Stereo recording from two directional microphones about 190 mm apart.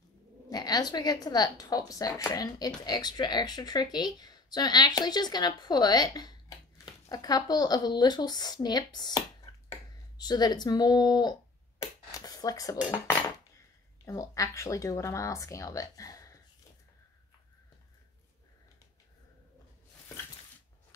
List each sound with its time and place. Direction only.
0.5 s speech: 20° left (ahead or behind)
11.8 s a sound: 20° left (ahead or behind)
14.0 s speech: 15° left (ahead or behind)